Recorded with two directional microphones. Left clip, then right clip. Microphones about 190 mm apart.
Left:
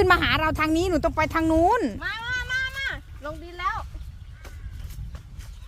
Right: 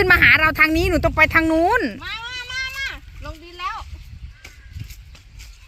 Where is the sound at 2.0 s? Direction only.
45° right (ahead or behind).